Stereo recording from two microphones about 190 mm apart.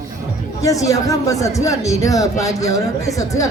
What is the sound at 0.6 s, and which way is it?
A man's voice, 15° left (ahead or behind).